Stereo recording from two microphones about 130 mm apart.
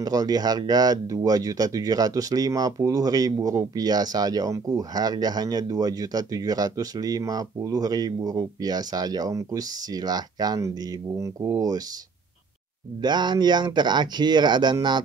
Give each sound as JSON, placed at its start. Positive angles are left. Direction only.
{"t": 0.0, "sound": "speech", "side_deg": -30}
{"t": 13.0, "sound": "speech", "side_deg": -35}